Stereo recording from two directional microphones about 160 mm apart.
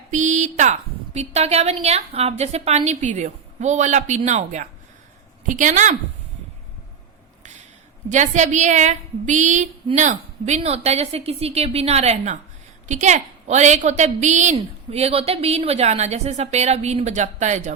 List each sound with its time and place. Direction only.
0.1 s a woman's voice: 50° right (ahead or behind)
8.1 s speech: 50° right (ahead or behind)